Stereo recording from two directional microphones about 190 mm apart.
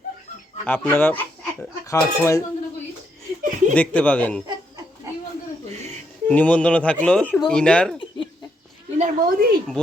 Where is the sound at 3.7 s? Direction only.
10° left (ahead or behind).